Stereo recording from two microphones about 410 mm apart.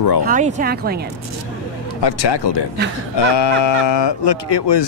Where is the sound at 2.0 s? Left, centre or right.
Left.